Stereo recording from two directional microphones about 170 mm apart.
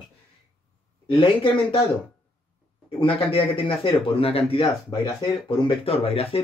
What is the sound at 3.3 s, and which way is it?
Speech, 30° left (ahead or behind).